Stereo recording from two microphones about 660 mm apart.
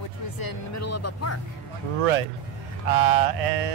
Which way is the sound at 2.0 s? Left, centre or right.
Right.